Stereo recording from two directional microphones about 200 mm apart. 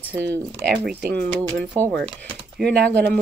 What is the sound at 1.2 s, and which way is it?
Speech, 10° left (ahead or behind).